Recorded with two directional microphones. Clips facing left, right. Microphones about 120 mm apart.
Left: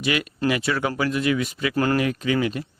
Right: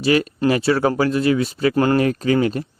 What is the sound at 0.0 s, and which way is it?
A man's voice, 35° right (ahead or behind).